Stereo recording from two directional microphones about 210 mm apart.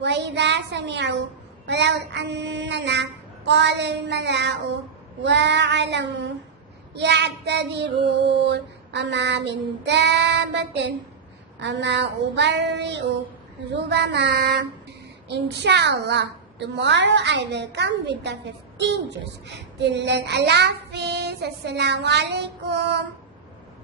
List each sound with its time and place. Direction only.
0.0 s a child's voice: 55° right (ahead or behind)
13.9 s child singing: 55° right (ahead or behind)
15.3 s a child's voice: 55° right (ahead or behind)
19.5 s child singing: 55° right (ahead or behind)